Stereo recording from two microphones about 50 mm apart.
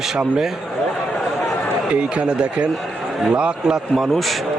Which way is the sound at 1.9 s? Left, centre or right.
Right.